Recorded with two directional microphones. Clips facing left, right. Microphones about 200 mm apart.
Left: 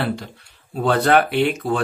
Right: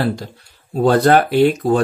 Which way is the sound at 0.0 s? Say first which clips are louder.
Right 4 dB; 40° right (ahead or behind).